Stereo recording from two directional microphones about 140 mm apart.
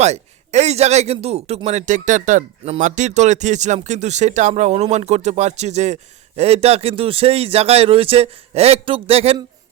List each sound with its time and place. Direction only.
0.0 s speech: 55° right (ahead or behind)